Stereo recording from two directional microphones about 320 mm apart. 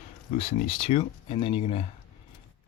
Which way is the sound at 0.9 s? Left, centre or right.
Centre.